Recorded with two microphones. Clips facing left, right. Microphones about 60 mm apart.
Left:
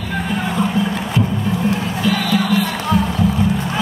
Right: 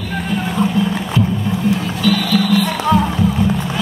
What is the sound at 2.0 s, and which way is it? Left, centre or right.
Music, left.